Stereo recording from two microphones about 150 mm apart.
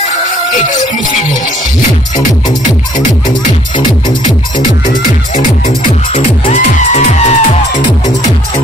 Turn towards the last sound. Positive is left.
turn(degrees=50)  # may be behind; listen again after turning